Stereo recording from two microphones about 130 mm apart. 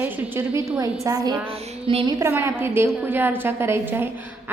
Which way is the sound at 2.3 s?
20° right (ahead or behind).